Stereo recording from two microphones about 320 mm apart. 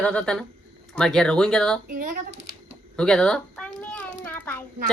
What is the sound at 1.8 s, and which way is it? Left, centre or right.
Speech, right.